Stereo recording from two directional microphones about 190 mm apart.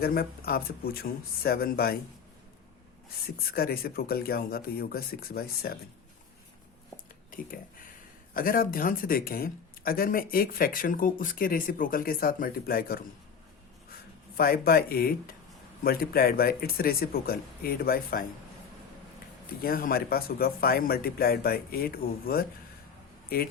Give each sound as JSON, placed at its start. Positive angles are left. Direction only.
{"t": 0.0, "sound": "speech", "side_deg": 55}
{"t": 3.2, "sound": "speech", "side_deg": 55}
{"t": 7.3, "sound": "speech", "side_deg": 45}
{"t": 14.3, "sound": "speech", "side_deg": 50}
{"t": 19.6, "sound": "speech", "side_deg": 50}